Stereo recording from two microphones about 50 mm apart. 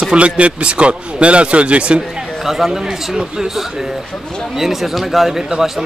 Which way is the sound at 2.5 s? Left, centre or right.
Centre.